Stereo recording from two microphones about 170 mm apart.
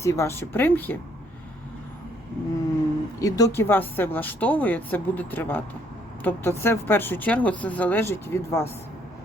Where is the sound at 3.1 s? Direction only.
20° left (ahead or behind).